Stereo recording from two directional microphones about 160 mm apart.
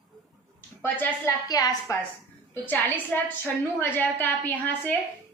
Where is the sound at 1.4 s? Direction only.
25° left (ahead or behind).